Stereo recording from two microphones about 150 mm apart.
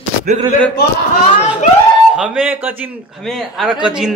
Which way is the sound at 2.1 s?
5° right (ahead or behind).